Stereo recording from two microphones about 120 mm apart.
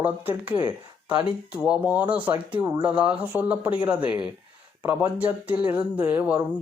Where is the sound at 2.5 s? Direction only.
35° right (ahead or behind).